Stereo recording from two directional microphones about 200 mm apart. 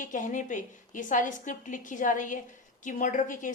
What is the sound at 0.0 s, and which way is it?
A woman's voice, 40° left (ahead or behind).